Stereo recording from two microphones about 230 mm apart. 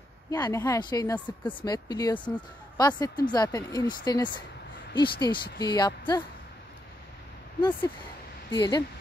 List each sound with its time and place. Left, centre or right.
0.3 s speech: centre
8.5 s speech: centre